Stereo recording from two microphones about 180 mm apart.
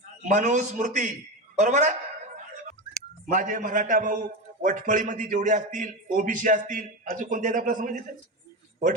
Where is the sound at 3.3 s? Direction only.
50° right (ahead or behind).